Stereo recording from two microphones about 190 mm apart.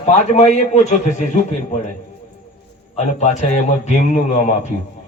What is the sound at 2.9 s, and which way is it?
A man's voice, 40° left (ahead or behind).